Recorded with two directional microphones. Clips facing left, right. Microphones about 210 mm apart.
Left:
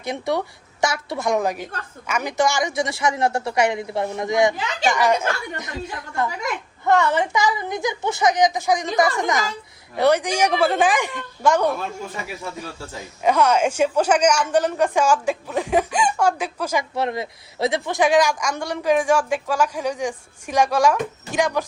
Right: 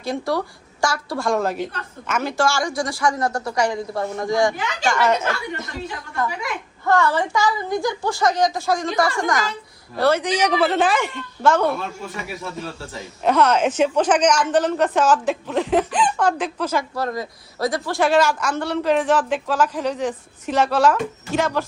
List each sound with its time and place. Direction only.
0.0 s speech: 20° left (ahead or behind)
6.8 s a woman's voice: 20° left (ahead or behind)
13.2 s a woman's voice: 10° left (ahead or behind)
16.9 s a woman's voice: 25° left (ahead or behind)